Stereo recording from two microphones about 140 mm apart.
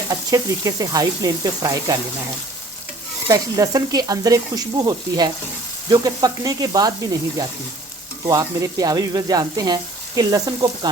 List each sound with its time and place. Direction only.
0.1 s speech: 25° right (ahead or behind)
3.2 s speech: 25° right (ahead or behind)